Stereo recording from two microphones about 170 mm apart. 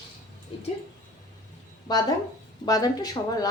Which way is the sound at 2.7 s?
20° left (ahead or behind).